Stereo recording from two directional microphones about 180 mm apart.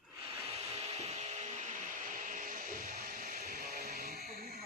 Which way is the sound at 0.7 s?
40° right (ahead or behind).